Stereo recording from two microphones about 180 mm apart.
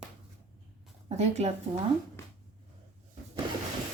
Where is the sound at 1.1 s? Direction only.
35° right (ahead or behind).